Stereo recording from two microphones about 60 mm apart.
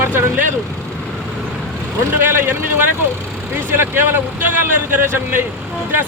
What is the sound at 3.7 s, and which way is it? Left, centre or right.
Speech, right.